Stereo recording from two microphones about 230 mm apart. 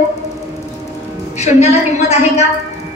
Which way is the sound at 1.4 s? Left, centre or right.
Left.